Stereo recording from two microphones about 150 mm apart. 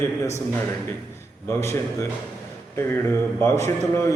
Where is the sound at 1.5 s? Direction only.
20° left (ahead or behind).